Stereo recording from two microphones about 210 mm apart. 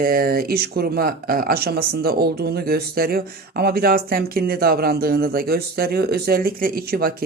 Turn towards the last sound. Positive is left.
turn(degrees=-45)  # may be behind; listen again after turning